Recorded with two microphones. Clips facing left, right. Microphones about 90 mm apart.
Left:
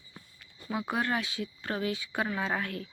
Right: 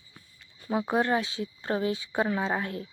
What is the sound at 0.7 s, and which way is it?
Speech, 30° right (ahead or behind).